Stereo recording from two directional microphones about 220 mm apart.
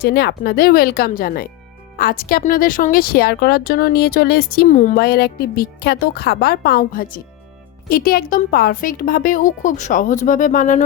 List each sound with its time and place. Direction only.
0.0 s a woman's voice: 50° left (ahead or behind)